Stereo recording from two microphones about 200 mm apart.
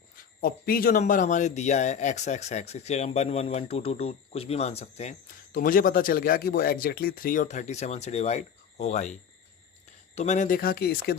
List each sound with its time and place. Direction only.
0.4 s speech: 45° left (ahead or behind)
10.2 s speech: 35° left (ahead or behind); by 11.2 s 55° left (ahead or behind)